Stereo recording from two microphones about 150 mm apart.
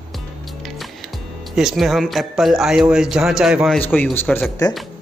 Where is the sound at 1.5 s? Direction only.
Centre (ahead or behind).